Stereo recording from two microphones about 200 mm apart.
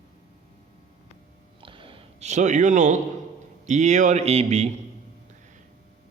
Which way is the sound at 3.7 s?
35° right (ahead or behind).